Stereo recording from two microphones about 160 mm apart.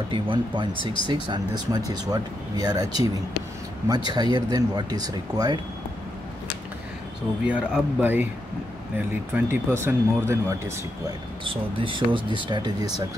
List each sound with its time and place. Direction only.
0.1 s speech: 30° right (ahead or behind)
7.4 s speech: 5° right (ahead or behind)
11.4 s speech: 30° right (ahead or behind)